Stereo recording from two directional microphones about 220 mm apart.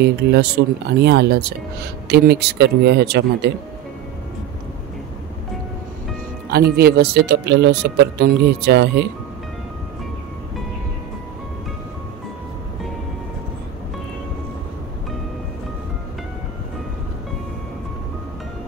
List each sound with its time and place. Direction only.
0.0 s speech: 45° right (ahead or behind)
6.5 s speech: 45° right (ahead or behind)